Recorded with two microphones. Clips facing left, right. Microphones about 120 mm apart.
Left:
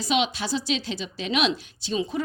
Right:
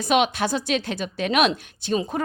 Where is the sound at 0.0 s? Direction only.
55° right (ahead or behind).